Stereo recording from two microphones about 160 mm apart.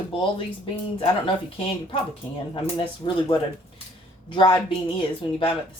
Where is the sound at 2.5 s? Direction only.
30° left (ahead or behind).